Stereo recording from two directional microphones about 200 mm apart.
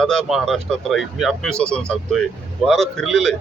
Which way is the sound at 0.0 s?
Centre (ahead or behind).